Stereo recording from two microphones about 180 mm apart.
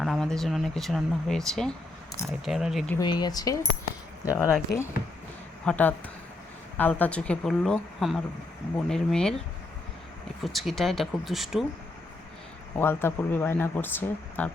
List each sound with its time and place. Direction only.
0.0 s speech: centre (ahead or behind)
3.0 s speech: 25° left (ahead or behind)
5.6 s speech: 10° left (ahead or behind)
10.4 s speech: centre (ahead or behind)
12.7 s speech: 10° left (ahead or behind)